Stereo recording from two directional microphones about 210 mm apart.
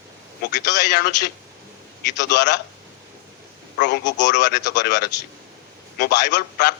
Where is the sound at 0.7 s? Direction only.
50° left (ahead or behind).